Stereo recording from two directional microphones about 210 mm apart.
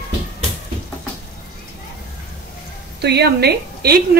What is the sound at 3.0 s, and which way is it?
A woman's voice, 50° right (ahead or behind).